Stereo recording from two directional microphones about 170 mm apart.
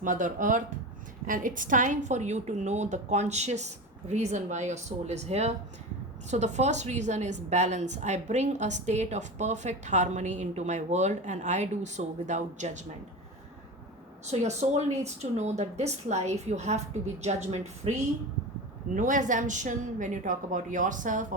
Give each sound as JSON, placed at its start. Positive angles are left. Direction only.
{"t": 0.0, "sound": "a woman's voice", "side_deg": -50}
{"t": 14.3, "sound": "a woman's voice", "side_deg": -40}
{"t": 18.9, "sound": "a woman's voice", "side_deg": -50}